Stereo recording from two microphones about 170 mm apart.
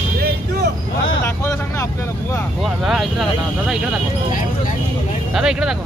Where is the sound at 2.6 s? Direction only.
Centre (ahead or behind).